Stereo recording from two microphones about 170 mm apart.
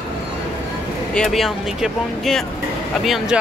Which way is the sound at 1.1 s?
Centre (ahead or behind).